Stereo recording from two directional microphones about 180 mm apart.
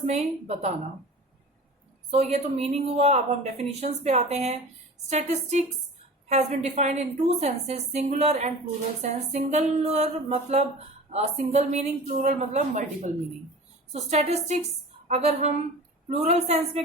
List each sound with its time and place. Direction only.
0.0 s speech: 40° right (ahead or behind)
2.0 s speech: 35° right (ahead or behind)